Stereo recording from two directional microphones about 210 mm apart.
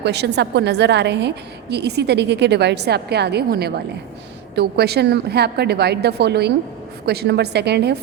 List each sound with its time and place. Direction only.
0.0 s a woman's voice: 55° right (ahead or behind)